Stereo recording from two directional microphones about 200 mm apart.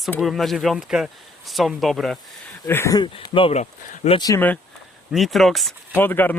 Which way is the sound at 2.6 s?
10° left (ahead or behind).